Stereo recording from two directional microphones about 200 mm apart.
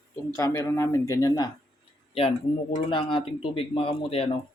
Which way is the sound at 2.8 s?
25° left (ahead or behind).